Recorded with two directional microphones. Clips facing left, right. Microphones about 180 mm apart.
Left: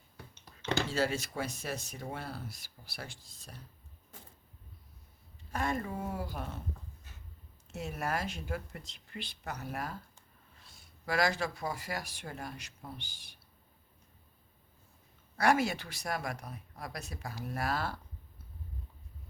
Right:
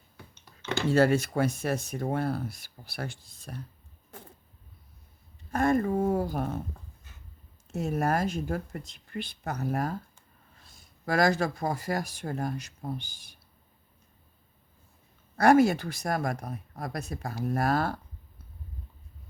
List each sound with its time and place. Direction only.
0.9 s speech: 55° right (ahead or behind)
4.1 s a sound: 60° right (ahead or behind)
5.5 s speech: 50° right (ahead or behind)
7.7 s speech: 45° right (ahead or behind)
15.4 s speech: 45° right (ahead or behind)